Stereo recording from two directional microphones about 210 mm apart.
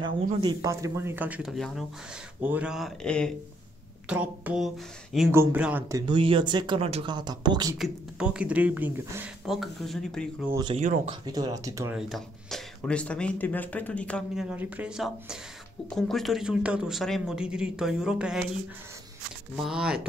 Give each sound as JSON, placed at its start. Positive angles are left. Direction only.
{"t": 0.4, "sound": "speech", "side_deg": -15}
{"t": 7.7, "sound": "speech", "side_deg": -5}
{"t": 10.5, "sound": "speech", "side_deg": -20}
{"t": 11.9, "sound": "speech", "side_deg": 0}